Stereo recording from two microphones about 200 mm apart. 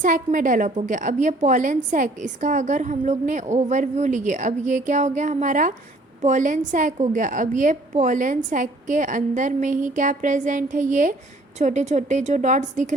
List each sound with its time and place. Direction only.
0.0 s a woman's voice: 40° right (ahead or behind)